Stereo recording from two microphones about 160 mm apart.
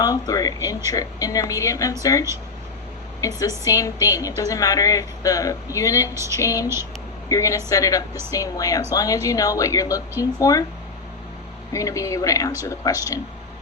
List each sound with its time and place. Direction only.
0.0 s a woman's voice: 25° left (ahead or behind)
11.7 s a woman's voice: 20° left (ahead or behind)